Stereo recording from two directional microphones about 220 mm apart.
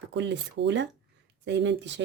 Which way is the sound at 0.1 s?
55° right (ahead or behind).